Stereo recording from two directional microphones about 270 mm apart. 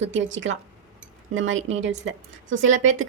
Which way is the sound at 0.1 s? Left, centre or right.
Right.